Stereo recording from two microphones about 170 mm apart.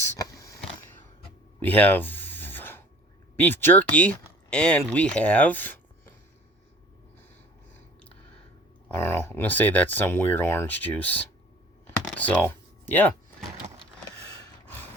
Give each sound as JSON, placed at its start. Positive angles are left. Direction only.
{"t": 0.0, "sound": "a sound", "side_deg": 20}
{"t": 3.3, "sound": "speech", "side_deg": 10}
{"t": 9.0, "sound": "speech", "side_deg": 15}
{"t": 12.0, "sound": "computer keyboard", "side_deg": 10}